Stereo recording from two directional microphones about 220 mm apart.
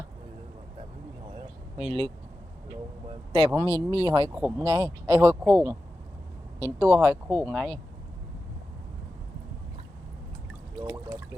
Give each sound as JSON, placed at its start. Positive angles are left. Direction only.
{"t": 1.3, "sound": "a sound", "side_deg": -25}
{"t": 3.3, "sound": "speech", "side_deg": -25}
{"t": 10.8, "sound": "speech", "side_deg": -15}